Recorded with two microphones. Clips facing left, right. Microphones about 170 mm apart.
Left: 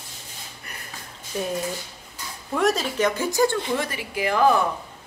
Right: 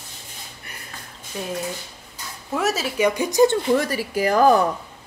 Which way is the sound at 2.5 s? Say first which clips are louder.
Left 1 dB; 5° right (ahead or behind).